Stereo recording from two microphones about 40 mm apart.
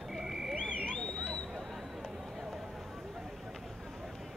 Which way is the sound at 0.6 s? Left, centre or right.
Left.